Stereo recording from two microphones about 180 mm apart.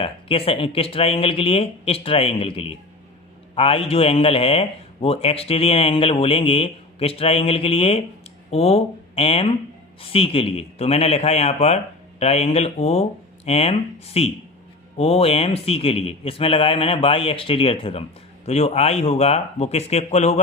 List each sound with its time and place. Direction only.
0.0 s a man's voice: 30° left (ahead or behind)